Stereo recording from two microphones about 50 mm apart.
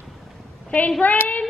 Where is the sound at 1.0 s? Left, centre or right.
Left.